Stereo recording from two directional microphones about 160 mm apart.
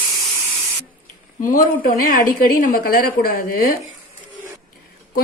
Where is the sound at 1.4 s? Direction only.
55° left (ahead or behind).